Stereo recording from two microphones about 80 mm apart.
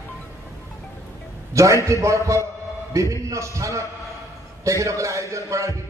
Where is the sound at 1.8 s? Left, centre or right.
Right.